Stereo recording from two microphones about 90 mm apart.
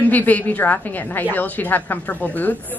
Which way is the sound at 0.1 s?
20° left (ahead or behind).